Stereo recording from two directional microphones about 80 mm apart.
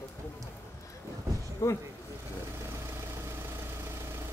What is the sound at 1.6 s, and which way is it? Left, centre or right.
Speech, left.